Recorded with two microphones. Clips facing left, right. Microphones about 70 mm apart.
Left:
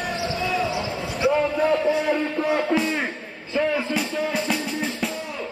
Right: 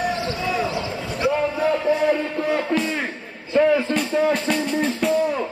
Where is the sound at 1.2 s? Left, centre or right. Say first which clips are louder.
Left 1 dB; centre.